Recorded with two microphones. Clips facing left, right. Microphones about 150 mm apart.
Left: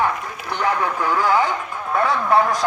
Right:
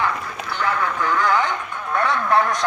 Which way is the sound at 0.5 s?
15° left (ahead or behind).